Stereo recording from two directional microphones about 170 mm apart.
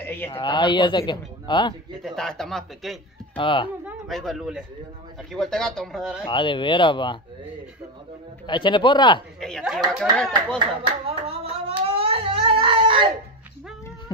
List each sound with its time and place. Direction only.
0.0 s speech: 10° left (ahead or behind)
0.3 s speech: 25° left (ahead or behind)
2.0 s speech: 5° left (ahead or behind)
3.3 s speech: 30° left (ahead or behind)
3.8 s speech: centre (ahead or behind)
6.2 s speech: 30° left (ahead or behind)
8.5 s speech: 30° left (ahead or behind)
9.4 s speech: centre (ahead or behind)
11.1 s a sound: 35° right (ahead or behind)